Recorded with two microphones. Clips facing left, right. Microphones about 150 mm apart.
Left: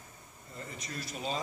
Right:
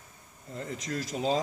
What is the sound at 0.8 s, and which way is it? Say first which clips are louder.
Speech: right 8 dB; 90° right.